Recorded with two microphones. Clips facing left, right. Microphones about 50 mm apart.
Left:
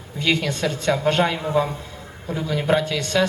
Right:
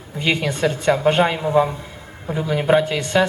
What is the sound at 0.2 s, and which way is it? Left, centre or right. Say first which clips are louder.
A man's voice: right 2 dB; right.